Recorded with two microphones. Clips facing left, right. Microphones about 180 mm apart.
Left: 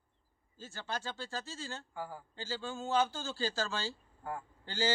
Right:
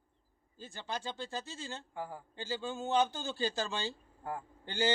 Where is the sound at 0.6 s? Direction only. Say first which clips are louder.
Even; 15° right (ahead or behind).